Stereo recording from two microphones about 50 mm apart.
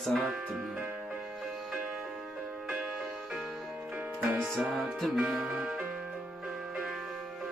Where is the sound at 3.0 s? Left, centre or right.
Centre.